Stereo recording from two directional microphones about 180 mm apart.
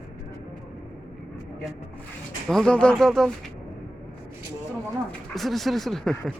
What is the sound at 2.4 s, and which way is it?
Speech, 5° left (ahead or behind).